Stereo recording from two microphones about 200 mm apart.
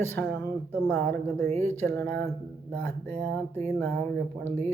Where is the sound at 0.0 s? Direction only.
10° left (ahead or behind).